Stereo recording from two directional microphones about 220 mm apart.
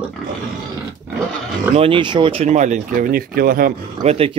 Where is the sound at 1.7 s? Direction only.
25° right (ahead or behind); by 4.1 s 40° right (ahead or behind).